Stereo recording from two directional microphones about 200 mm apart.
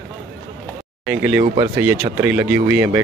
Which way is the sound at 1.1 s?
5° right (ahead or behind).